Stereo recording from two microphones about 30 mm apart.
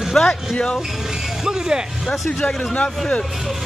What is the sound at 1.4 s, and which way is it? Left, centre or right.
Speech, right.